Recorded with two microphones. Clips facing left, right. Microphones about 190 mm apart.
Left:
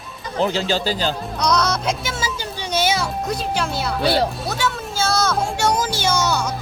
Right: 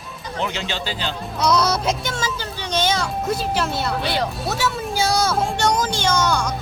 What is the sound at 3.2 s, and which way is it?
Speech, centre (ahead or behind).